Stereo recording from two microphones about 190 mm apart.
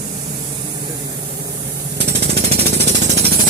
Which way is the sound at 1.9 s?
60° right (ahead or behind).